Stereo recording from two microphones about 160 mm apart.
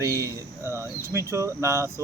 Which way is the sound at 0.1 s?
20° right (ahead or behind).